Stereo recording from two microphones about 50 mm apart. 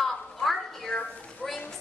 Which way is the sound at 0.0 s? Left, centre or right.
Centre.